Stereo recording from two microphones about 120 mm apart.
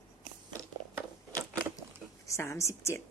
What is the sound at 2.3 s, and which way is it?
Speech, 25° left (ahead or behind).